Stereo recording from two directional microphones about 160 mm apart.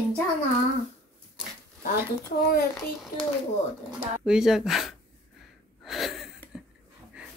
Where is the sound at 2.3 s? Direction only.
60° left (ahead or behind).